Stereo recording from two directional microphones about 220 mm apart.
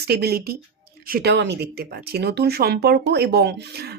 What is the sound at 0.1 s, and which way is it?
Speech, 45° right (ahead or behind).